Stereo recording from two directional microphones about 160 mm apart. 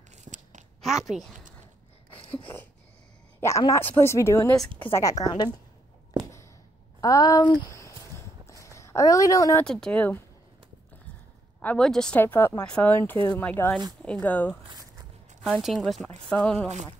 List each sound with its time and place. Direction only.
0.2 s a sound: 50° right (ahead or behind)
0.7 s a woman's voice: centre (ahead or behind)
2.3 s a woman's voice: 15° left (ahead or behind)
7.0 s walk: 20° left (ahead or behind)
9.7 s speech: 5° left (ahead or behind)
11.6 s speech: 5° left (ahead or behind)
15.4 s speech: centre (ahead or behind)
16.6 s speech: 45° right (ahead or behind)